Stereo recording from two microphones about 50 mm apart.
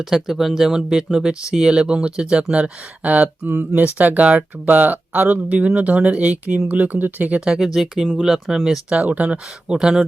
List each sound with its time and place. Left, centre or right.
0.0 s speech: centre; by 7.3 s right
7.4 s speech: centre
8.9 s speech: right